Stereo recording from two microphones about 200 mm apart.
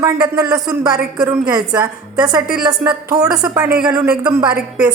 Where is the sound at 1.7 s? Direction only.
15° right (ahead or behind).